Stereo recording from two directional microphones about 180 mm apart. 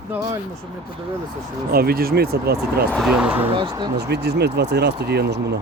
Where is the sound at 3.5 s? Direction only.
25° right (ahead or behind).